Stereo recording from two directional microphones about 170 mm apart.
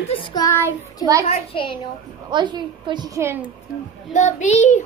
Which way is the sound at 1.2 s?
35° left (ahead or behind).